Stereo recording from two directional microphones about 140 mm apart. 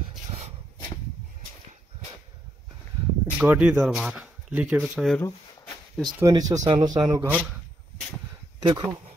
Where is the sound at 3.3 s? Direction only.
10° right (ahead or behind).